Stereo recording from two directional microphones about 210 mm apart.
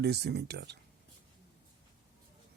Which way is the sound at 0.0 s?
50° right (ahead or behind).